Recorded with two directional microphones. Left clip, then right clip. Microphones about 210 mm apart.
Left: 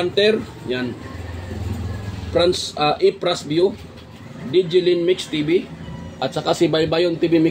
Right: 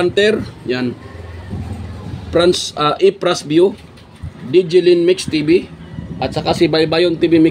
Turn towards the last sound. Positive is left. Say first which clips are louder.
# right 5 dB
turn(degrees=-40)  # may be behind; listen again after turning